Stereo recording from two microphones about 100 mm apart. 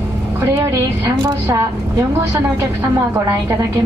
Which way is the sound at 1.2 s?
40° right (ahead or behind).